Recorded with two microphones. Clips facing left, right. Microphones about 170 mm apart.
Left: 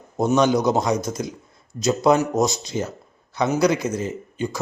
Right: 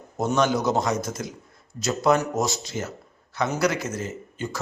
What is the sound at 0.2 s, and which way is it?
Speech, 15° left (ahead or behind).